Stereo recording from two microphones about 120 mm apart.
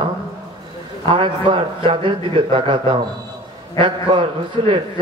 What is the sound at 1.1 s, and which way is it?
A man's voice, 45° right (ahead or behind).